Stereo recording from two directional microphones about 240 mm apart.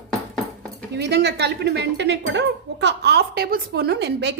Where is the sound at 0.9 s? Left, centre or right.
Right.